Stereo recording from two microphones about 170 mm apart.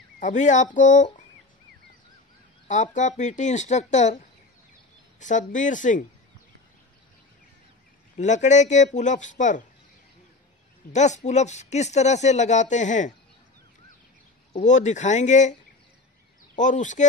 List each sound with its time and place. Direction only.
0.2 s speech: 45° left (ahead or behind)
2.7 s speech: 45° left (ahead or behind)
5.2 s speech: 45° left (ahead or behind)
8.2 s speech: 45° left (ahead or behind)
10.9 s speech: 45° left (ahead or behind)
14.5 s speech: 45° left (ahead or behind)
16.5 s speech: 45° left (ahead or behind)